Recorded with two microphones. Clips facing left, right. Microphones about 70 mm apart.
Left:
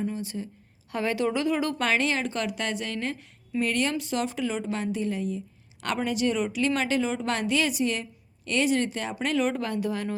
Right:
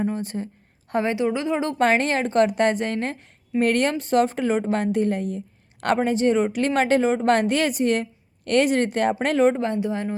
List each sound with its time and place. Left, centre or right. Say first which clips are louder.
0.0 s a woman's voice: right 5 dB; right
1.0 s a woman's voice: even; right
1.8 s a woman's voice: right 6 dB; right
6.0 s a woman's voice: right 5 dB; right
9.5 s a woman's voice: right 6 dB; right